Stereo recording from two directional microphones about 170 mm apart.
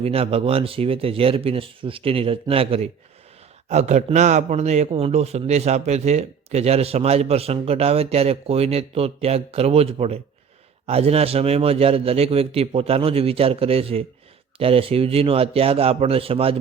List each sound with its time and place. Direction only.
0.0 s speech: 35° right (ahead or behind)